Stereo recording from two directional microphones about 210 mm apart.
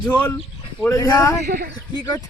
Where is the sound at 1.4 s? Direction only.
50° right (ahead or behind).